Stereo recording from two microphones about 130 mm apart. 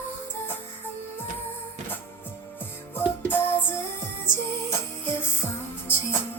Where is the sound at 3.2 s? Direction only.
15° left (ahead or behind).